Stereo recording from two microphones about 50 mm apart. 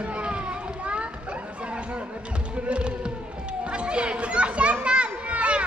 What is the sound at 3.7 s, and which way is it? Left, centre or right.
Children playing, right.